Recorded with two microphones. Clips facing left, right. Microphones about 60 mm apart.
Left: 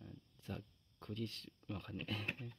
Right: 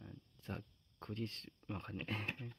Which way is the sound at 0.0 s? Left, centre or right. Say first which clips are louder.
Right 1 dB; right.